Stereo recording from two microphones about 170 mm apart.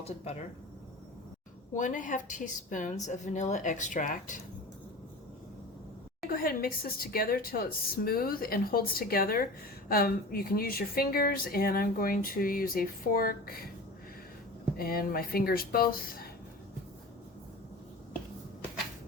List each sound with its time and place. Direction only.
0.0 s speech: 40° left (ahead or behind)
1.7 s a woman's voice: 50° left (ahead or behind)
6.3 s speech: 60° left (ahead or behind)
14.8 s speech: 60° left (ahead or behind)